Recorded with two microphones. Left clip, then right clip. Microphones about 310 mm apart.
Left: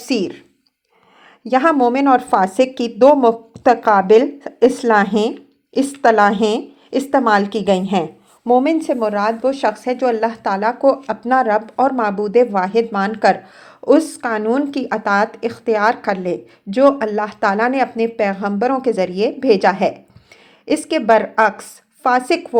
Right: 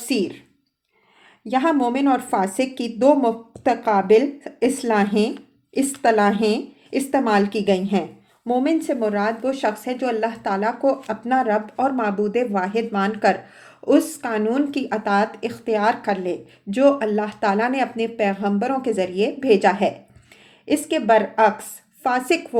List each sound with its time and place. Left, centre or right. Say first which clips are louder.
0.0 s speech: left 3 dB; left
1.5 s a woman's voice: left 6 dB; left